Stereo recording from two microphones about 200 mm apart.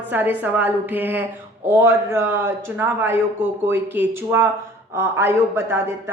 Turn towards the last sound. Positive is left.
turn(degrees=-10)  # may be behind; listen again after turning